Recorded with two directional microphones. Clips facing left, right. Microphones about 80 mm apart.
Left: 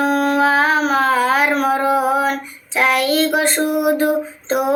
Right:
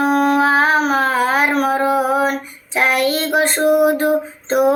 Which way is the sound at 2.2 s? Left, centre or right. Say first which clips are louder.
Right 1 dB; centre.